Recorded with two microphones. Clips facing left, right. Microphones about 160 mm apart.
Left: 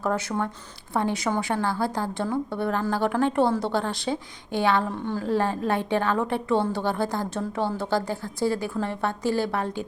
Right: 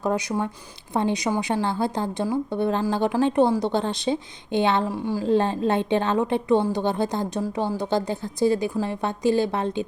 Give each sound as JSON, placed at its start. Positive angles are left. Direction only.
{"t": 0.0, "sound": "a woman's voice", "side_deg": -15}
{"t": 4.9, "sound": "speech", "side_deg": -10}
{"t": 5.2, "sound": "a woman's voice", "side_deg": -20}